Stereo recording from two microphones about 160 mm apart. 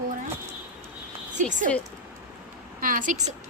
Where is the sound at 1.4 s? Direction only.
50° right (ahead or behind).